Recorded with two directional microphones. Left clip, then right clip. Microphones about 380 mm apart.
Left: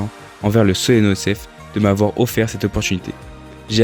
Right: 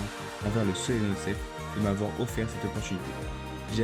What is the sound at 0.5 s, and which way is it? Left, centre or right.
Speech, left.